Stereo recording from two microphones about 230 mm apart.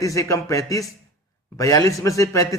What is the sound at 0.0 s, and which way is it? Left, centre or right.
A man's voice, centre.